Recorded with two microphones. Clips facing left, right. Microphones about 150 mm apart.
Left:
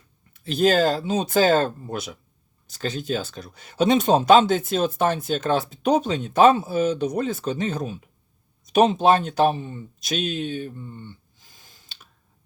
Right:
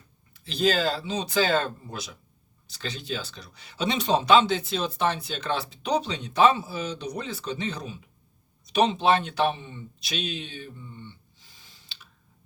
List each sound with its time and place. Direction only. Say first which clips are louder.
0.3 s speech: left 6 dB; 50° left (ahead or behind)